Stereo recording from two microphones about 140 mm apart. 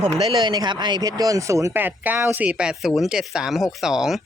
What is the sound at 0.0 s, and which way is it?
Speech, 35° right (ahead or behind).